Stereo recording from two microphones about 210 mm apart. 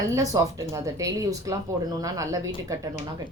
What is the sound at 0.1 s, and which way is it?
Speech, 15° right (ahead or behind).